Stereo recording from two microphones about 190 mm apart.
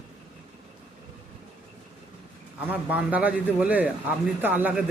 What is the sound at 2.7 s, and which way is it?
A man's voice, 10° right (ahead or behind).